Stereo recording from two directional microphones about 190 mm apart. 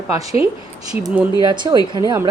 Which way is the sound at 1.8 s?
20° left (ahead or behind).